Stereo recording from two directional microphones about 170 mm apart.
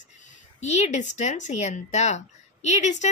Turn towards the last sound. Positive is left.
turn(degrees=45)  # may be behind; listen again after turning